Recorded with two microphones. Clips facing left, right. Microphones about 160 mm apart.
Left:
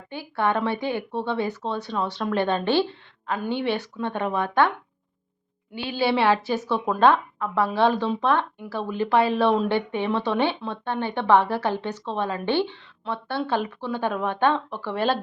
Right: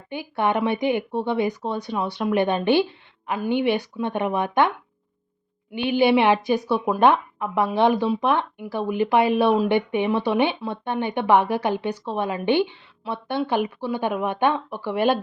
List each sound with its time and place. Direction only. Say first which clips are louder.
0.1 s speech: right 2 dB; 15° right (ahead or behind)
5.7 s speech: right 5 dB; 20° right (ahead or behind)